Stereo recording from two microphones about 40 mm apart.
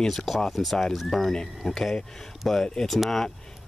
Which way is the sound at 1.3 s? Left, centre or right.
Centre.